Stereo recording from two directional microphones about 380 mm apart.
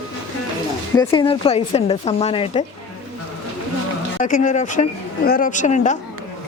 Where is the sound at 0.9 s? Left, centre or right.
Centre.